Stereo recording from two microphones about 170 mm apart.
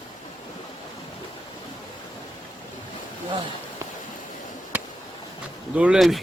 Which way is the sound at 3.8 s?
15° right (ahead or behind).